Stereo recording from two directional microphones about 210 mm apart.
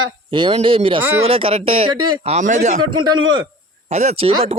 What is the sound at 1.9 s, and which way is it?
Speech, 90° right.